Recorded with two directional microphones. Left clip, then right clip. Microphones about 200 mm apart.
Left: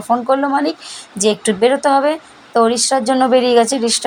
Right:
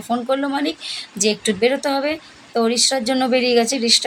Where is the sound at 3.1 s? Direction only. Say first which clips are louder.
Left 6 dB; centre (ahead or behind).